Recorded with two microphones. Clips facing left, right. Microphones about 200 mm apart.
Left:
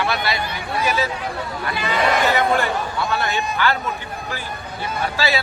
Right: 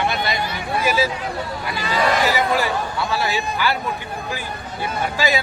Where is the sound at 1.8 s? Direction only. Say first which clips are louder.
Even; 60° left (ahead or behind).